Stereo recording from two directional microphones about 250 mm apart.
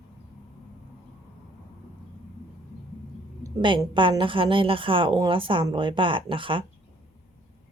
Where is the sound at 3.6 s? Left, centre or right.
Centre.